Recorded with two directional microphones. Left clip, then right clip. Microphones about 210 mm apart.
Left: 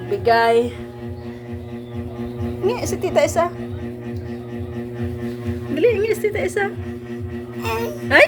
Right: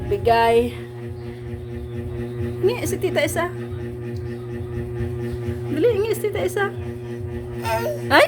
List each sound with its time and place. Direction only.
0.1 s speech: 15° right (ahead or behind)
2.6 s a woman's voice: 10° right (ahead or behind)
5.7 s music: 15° right (ahead or behind)
7.6 s a woman's voice: 10° right (ahead or behind)